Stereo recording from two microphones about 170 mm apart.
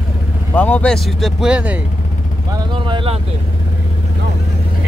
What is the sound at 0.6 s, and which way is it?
Speech, 10° left (ahead or behind).